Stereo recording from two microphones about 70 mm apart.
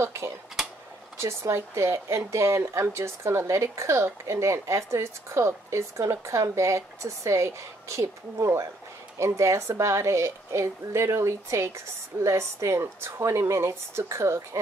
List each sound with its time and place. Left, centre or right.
0.0 s speech: right